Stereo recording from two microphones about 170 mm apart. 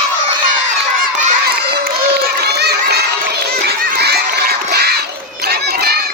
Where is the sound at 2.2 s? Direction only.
70° right (ahead or behind).